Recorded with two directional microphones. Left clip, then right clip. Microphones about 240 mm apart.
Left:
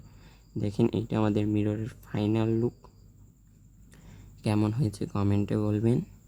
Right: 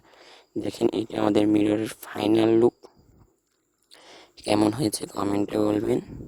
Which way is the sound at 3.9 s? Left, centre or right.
Right.